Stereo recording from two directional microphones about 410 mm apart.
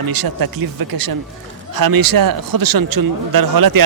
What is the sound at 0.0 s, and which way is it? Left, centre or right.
A man's voice, right.